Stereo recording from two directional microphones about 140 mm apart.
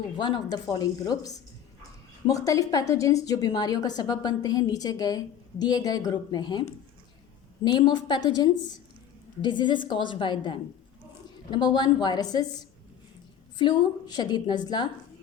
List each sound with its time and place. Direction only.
0.2 s a woman's voice: 30° left (ahead or behind)